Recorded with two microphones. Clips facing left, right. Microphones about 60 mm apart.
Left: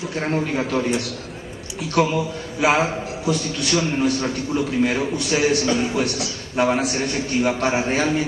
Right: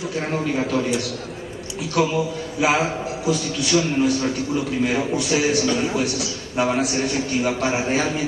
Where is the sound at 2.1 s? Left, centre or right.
Centre.